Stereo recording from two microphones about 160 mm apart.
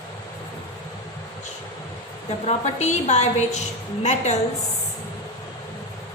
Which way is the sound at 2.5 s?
45° left (ahead or behind).